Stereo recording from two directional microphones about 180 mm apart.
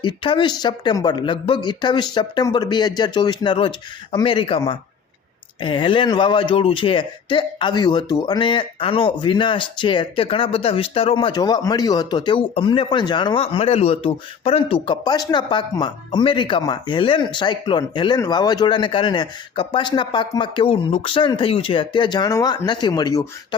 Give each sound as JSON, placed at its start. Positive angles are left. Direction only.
{"t": 0.0, "sound": "speech", "side_deg": 25}